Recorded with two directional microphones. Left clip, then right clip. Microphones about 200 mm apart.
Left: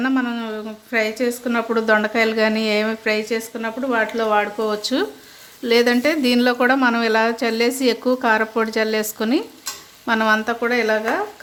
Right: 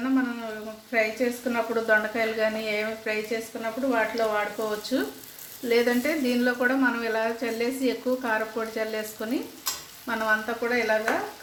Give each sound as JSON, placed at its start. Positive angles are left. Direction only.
{"t": 0.9, "sound": "speech", "side_deg": 40}